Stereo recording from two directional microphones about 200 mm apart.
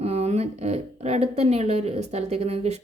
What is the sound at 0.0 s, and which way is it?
A woman's voice, 30° right (ahead or behind).